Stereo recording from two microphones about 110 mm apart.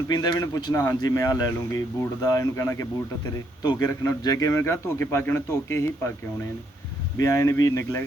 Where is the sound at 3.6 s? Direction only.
40° left (ahead or behind); by 6.1 s 25° left (ahead or behind).